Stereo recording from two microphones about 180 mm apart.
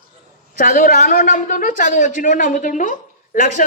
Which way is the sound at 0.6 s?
50° left (ahead or behind).